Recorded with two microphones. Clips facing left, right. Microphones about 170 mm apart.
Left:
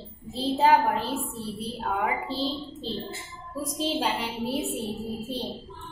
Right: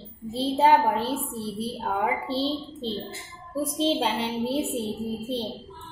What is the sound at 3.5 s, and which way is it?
A woman's voice, 25° right (ahead or behind).